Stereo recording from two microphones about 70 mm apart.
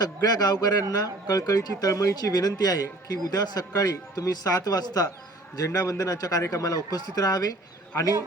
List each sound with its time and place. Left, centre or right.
0.0 s a man's voice: left